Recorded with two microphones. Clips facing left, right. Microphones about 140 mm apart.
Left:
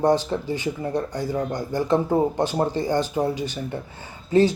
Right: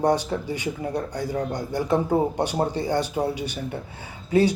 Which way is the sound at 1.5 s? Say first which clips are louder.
Left 2 dB; 10° right (ahead or behind).